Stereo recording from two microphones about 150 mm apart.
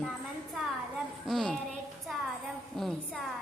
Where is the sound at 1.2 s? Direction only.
Centre (ahead or behind).